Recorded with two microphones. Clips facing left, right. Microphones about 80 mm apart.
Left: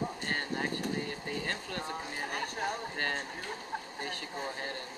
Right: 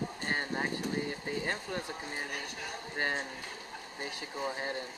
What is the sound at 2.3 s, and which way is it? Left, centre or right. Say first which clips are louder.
Speech: left 6 dB; left.